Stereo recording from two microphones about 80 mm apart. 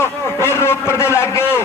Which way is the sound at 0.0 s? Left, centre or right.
Left.